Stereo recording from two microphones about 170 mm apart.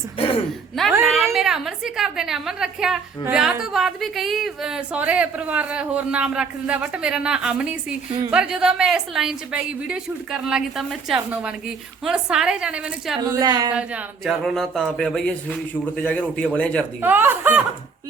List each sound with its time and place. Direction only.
1.0 s a woman's voice: centre (ahead or behind)
13.2 s a woman's voice: 20° right (ahead or behind)
13.7 s a woman's voice: 5° right (ahead or behind)
17.0 s speech: 10° right (ahead or behind)